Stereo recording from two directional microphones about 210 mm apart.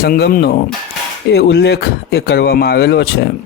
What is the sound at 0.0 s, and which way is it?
Speech, 45° left (ahead or behind).